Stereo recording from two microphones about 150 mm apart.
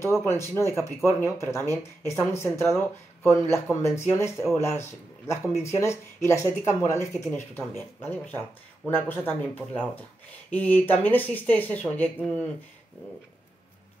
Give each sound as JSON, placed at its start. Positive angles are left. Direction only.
{"t": 0.0, "sound": "speech", "side_deg": 15}
{"t": 10.5, "sound": "speech", "side_deg": 10}